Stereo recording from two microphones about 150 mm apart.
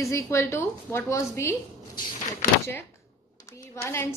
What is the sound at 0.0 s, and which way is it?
A woman's voice, 20° left (ahead or behind).